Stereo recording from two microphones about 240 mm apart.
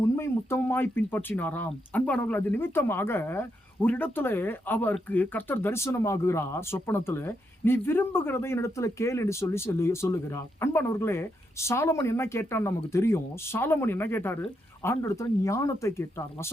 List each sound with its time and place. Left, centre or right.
0.2 s speech: centre